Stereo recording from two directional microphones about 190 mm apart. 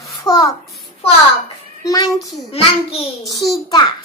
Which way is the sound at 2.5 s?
30° left (ahead or behind).